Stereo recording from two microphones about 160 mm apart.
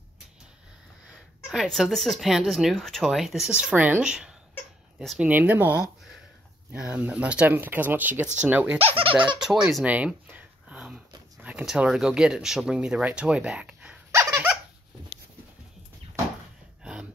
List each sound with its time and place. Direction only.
1.5 s speech: centre (ahead or behind)
8.7 s speech: 35° right (ahead or behind)
9.4 s a sound: 5° right (ahead or behind)
11.4 s speech: 5° right (ahead or behind)